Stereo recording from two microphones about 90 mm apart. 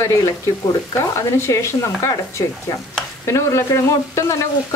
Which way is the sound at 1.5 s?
35° left (ahead or behind).